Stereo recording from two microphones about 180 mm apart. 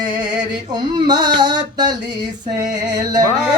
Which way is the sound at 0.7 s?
25° right (ahead or behind).